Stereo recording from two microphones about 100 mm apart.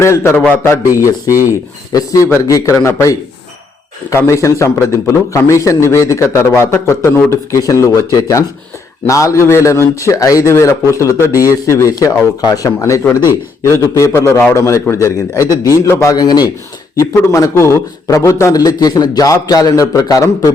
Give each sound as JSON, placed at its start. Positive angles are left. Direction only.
{"t": 0.0, "sound": "a man's voice", "side_deg": 25}
{"t": 1.9, "sound": "a man's voice", "side_deg": 35}
{"t": 4.3, "sound": "a man's voice", "side_deg": 30}
{"t": 17.0, "sound": "a man's voice", "side_deg": 30}